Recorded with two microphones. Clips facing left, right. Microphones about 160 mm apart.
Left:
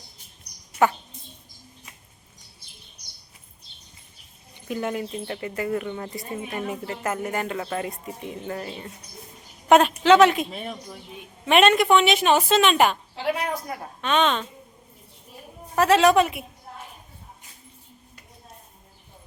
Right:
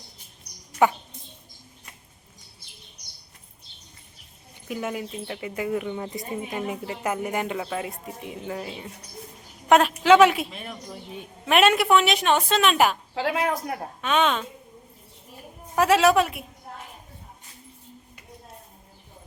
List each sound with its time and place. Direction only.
0.8 s speech: 15° right (ahead or behind)
4.7 s speech: 5° right (ahead or behind)
7.7 s a woman's voice: 5° right (ahead or behind)
13.1 s a woman's voice: 90° right
14.0 s speech: 5° right (ahead or behind)
15.7 s a woman's voice: 10° right (ahead or behind)